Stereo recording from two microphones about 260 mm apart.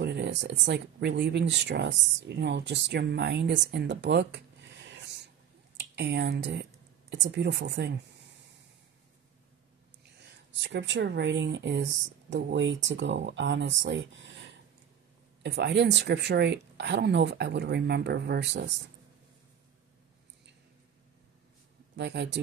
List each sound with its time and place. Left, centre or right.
0.0 s speech: right
10.2 s speech: right
15.4 s a woman's voice: right
21.9 s a woman's voice: right